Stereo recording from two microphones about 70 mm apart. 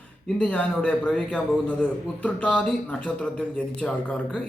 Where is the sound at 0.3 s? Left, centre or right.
Centre.